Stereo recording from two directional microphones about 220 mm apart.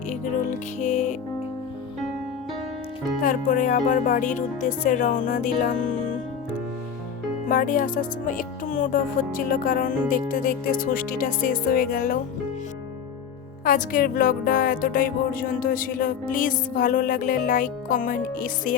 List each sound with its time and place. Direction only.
0.8 s music: 35° left (ahead or behind)
3.2 s speech: 35° left (ahead or behind)
7.4 s speech: 40° left (ahead or behind)
13.7 s speech: 40° left (ahead or behind)